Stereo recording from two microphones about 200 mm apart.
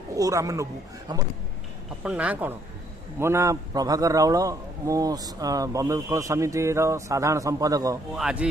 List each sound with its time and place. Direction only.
0.2 s a man's voice: 15° right (ahead or behind)
8.1 s speech: 5° right (ahead or behind)